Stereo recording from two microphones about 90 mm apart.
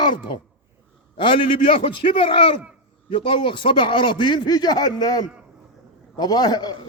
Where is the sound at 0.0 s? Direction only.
60° left (ahead or behind).